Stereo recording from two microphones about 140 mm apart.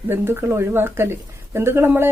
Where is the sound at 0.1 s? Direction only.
20° right (ahead or behind).